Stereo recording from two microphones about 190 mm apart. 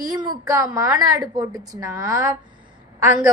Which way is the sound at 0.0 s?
20° right (ahead or behind).